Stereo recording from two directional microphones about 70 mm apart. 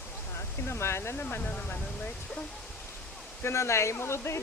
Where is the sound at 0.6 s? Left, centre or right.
Left.